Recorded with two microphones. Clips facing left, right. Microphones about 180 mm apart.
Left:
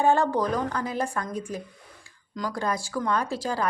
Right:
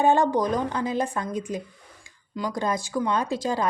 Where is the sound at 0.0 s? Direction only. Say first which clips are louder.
Right 2 dB; 20° right (ahead or behind).